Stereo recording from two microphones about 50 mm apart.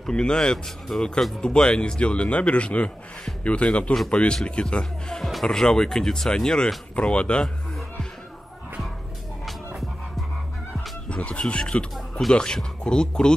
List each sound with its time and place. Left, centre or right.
0.0 s speech: centre
5.1 s speech: centre; by 7.4 s left
11.1 s speech: left